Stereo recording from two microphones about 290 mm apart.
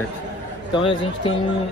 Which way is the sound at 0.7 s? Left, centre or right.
Centre.